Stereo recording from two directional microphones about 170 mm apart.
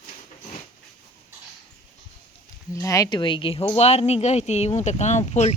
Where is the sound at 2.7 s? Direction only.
20° left (ahead or behind).